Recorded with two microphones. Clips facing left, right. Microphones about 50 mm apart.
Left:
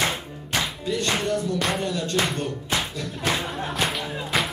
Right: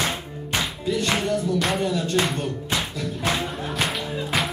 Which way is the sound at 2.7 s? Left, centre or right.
Centre.